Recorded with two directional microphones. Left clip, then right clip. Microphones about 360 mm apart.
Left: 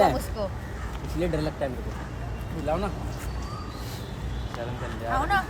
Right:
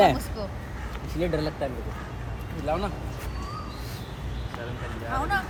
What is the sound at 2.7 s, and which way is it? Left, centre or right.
Speech, centre.